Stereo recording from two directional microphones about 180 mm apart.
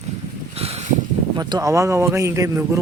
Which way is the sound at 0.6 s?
35° right (ahead or behind).